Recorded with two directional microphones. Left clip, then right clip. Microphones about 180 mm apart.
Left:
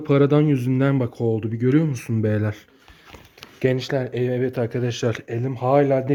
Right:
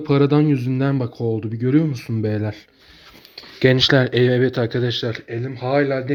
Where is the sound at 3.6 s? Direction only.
15° right (ahead or behind).